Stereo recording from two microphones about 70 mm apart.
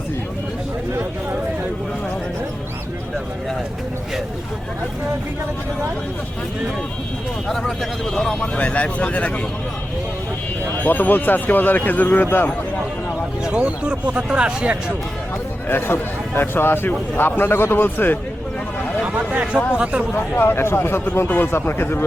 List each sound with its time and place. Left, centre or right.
7.4 s speech: centre
8.5 s speech: centre
10.8 s speech: left
13.4 s speech: centre
15.7 s speech: left
19.0 s a sound: right
19.7 s speech: centre
20.1 s speech: left